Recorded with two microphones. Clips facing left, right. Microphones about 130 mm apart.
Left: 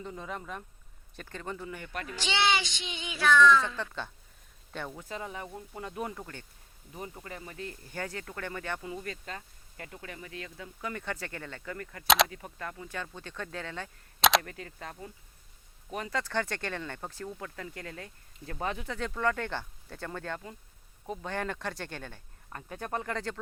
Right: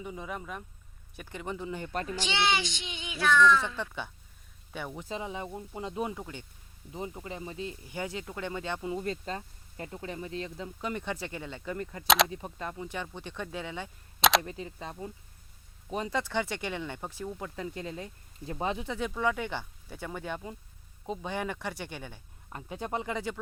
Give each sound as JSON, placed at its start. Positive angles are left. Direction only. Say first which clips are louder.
{"t": 0.0, "sound": "speech", "louder": "right 1 dB", "side_deg": -5}
{"t": 2.3, "sound": "child singing", "louder": "left 1 dB", "side_deg": 90}
{"t": 3.8, "sound": "speech", "louder": "right 1 dB", "side_deg": -15}
{"t": 12.0, "sound": "speech", "louder": "even", "side_deg": 0}
{"t": 12.3, "sound": "speech", "louder": "right 3 dB", "side_deg": -20}
{"t": 14.2, "sound": "camera", "louder": "even", "side_deg": 0}
{"t": 14.4, "sound": "speech", "louder": "right 3 dB", "side_deg": -20}